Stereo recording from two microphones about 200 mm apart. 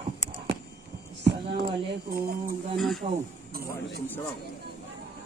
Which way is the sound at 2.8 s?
Centre (ahead or behind).